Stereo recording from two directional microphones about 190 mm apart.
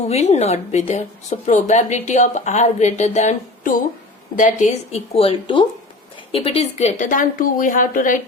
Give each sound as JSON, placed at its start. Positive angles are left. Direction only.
{"t": 0.1, "sound": "a woman's voice", "side_deg": 35}